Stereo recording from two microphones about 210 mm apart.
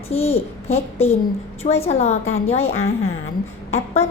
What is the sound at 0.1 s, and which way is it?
A woman's voice, 30° left (ahead or behind).